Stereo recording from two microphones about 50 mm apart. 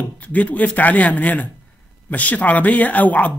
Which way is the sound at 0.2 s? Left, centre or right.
Left.